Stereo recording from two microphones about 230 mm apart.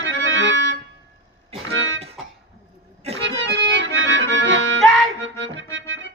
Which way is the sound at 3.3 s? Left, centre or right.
Right.